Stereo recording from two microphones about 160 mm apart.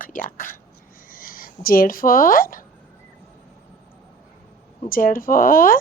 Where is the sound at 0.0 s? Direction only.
60° left (ahead or behind).